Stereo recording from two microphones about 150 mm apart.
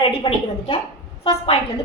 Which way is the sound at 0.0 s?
35° left (ahead or behind).